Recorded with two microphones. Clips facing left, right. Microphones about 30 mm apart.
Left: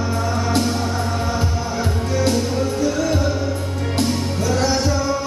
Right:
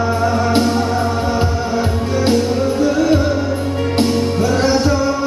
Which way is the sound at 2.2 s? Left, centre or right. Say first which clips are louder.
Right 5 dB; right.